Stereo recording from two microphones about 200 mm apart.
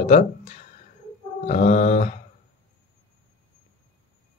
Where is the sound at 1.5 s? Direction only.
35° left (ahead or behind).